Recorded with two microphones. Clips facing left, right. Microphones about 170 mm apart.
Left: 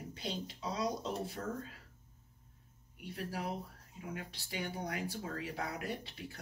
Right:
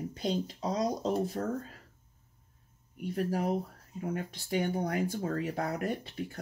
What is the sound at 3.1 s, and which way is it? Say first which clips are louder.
Speech: right 9 dB; 45° right (ahead or behind).